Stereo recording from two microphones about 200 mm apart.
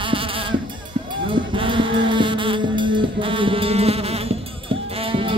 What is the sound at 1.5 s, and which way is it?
Music, 25° right (ahead or behind).